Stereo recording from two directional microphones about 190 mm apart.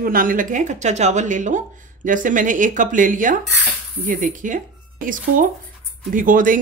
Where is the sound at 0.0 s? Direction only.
50° right (ahead or behind).